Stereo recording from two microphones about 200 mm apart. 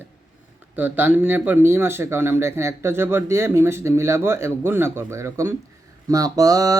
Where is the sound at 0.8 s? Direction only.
10° right (ahead or behind).